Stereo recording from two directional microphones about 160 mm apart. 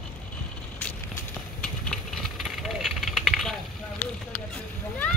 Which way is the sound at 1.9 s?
Centre (ahead or behind).